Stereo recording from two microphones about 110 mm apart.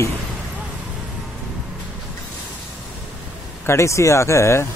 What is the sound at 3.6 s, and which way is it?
Speech, 25° left (ahead or behind).